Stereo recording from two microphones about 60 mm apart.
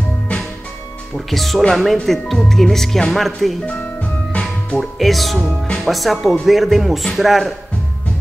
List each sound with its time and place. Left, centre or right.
1.1 s speech: centre
4.3 s music: left
4.7 s speech: centre